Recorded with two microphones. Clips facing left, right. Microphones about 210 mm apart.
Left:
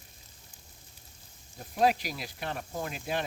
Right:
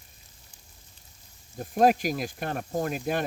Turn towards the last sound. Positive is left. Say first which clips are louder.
# right 6 dB
turn(degrees=-50)  # may be behind; listen again after turning